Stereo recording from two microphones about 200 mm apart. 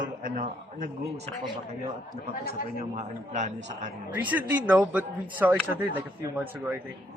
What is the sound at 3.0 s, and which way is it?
Speech, 35° right (ahead or behind).